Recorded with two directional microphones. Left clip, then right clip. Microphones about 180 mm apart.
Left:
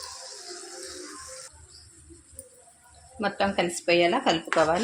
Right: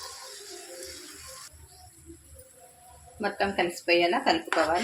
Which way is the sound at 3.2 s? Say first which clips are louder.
Left 2 dB; 35° left (ahead or behind).